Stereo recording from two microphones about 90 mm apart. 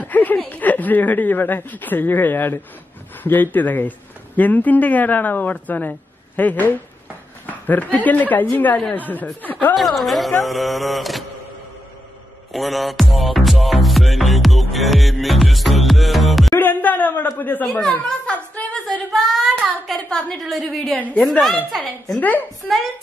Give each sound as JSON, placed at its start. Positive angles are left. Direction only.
{"t": 0.0, "sound": "speech", "side_deg": 20}
{"t": 9.8, "sound": "speech", "side_deg": 0}
{"t": 12.5, "sound": "music", "side_deg": 0}
{"t": 16.5, "sound": "a sound", "side_deg": 20}
{"t": 19.1, "sound": "child singing", "side_deg": 5}
{"t": 19.9, "sound": "a woman's voice", "side_deg": 5}
{"t": 20.8, "sound": "a woman's voice", "side_deg": 15}
{"t": 21.2, "sound": "speech", "side_deg": 0}
{"t": 22.6, "sound": "a woman's voice", "side_deg": 5}